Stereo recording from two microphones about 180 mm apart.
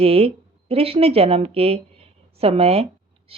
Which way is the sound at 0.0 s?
35° right (ahead or behind).